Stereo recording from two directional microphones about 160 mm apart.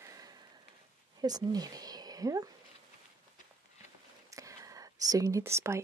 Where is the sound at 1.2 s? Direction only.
25° right (ahead or behind).